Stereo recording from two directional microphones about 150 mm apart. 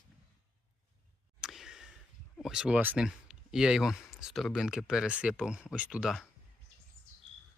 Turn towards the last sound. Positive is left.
turn(degrees=0)  # may be behind; listen again after turning